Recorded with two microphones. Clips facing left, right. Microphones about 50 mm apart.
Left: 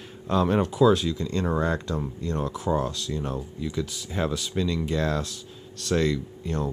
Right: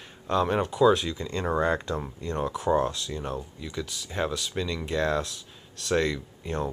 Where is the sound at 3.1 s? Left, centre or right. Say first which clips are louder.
Left 2 dB; centre.